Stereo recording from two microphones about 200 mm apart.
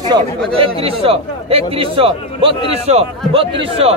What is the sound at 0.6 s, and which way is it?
A man's voice, 30° right (ahead or behind).